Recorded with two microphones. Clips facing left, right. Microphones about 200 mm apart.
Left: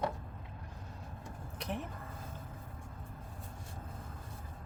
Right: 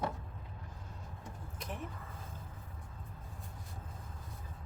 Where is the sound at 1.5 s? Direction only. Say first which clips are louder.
Left 5 dB; 70° left (ahead or behind).